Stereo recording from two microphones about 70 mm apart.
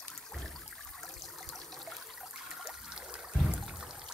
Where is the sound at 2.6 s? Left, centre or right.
Centre.